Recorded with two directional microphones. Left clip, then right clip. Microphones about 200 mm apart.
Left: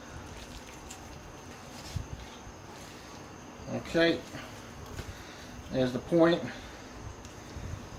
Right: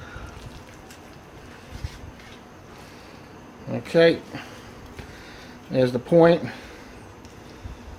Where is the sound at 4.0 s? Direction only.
55° right (ahead or behind).